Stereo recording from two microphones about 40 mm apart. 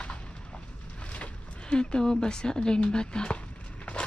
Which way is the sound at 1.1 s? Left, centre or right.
Left.